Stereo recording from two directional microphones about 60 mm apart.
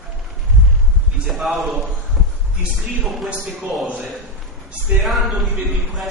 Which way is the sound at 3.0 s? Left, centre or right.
Centre.